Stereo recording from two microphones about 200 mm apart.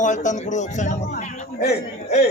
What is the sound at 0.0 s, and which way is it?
Speech, 40° left (ahead or behind).